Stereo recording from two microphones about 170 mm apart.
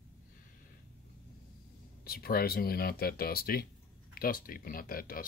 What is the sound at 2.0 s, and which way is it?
Speech, 60° left (ahead or behind).